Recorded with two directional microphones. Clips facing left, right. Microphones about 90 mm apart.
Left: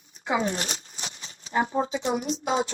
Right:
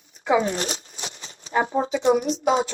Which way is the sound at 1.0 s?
35° right (ahead or behind).